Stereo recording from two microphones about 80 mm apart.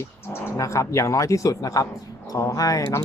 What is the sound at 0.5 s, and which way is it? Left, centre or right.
A man's voice, left.